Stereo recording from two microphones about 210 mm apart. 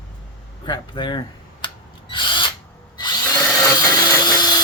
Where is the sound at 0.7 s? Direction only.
20° left (ahead or behind).